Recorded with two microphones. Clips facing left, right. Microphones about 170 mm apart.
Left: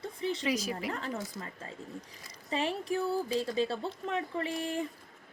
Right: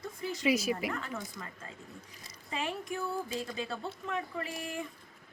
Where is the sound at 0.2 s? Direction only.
30° left (ahead or behind).